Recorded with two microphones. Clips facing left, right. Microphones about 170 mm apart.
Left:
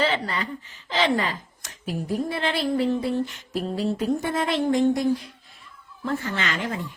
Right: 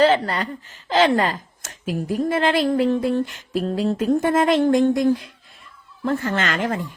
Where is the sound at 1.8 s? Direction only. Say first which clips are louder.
Right 3 dB; 90° right.